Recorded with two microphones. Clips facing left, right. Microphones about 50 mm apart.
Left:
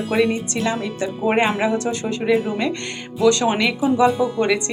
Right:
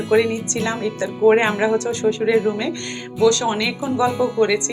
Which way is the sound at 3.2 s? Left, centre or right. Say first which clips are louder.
Even; left.